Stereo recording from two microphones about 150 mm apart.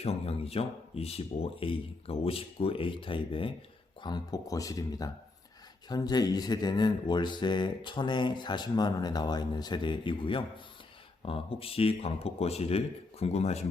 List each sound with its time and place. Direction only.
0.0 s speech: 45° left (ahead or behind)